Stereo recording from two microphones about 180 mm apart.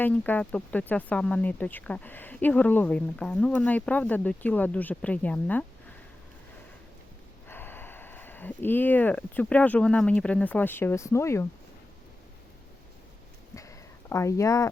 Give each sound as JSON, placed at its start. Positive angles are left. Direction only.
{"t": 0.0, "sound": "speech", "side_deg": 10}
{"t": 7.4, "sound": "speech", "side_deg": 10}
{"t": 13.6, "sound": "a sound", "side_deg": 15}